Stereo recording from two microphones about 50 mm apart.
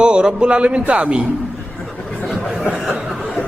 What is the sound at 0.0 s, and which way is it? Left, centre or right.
A man's voice, centre.